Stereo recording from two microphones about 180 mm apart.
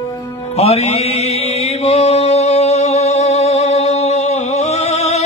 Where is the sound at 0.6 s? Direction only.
35° left (ahead or behind).